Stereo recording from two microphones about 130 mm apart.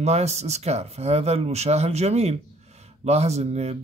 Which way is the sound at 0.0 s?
55° right (ahead or behind).